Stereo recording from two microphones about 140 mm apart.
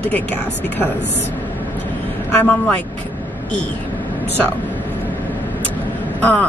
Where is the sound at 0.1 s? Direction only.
15° left (ahead or behind).